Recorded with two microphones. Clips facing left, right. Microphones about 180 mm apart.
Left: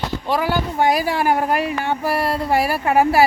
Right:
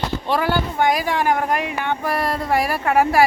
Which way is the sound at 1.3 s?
35° left (ahead or behind).